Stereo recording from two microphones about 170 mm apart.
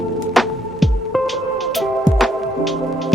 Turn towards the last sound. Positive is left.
turn(degrees=0)  # may be behind; listen again after turning